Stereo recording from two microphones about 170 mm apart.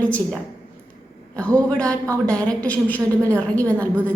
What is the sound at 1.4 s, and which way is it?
A woman's voice, 5° left (ahead or behind).